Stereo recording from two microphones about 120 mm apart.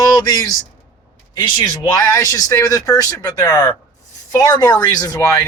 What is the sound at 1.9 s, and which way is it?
Speech, 30° left (ahead or behind).